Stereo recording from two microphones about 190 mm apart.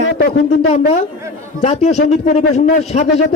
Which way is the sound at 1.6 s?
35° left (ahead or behind).